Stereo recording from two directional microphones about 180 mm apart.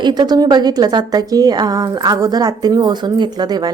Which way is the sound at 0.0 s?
25° right (ahead or behind).